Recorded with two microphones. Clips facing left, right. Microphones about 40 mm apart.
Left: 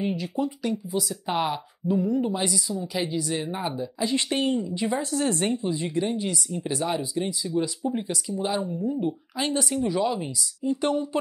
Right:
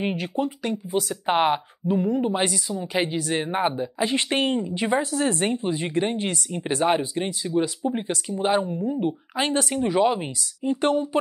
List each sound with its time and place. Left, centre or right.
0.0 s speech: right